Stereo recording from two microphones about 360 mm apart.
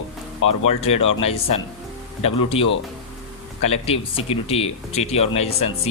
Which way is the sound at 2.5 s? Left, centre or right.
Centre.